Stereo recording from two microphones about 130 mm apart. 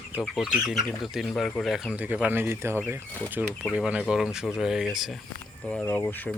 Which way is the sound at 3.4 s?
5° right (ahead or behind).